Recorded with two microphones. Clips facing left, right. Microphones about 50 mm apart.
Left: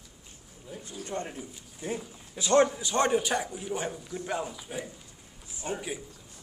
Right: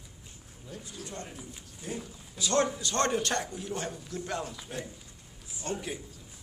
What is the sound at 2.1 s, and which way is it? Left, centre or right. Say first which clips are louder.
A man's voice: left 6 dB; left.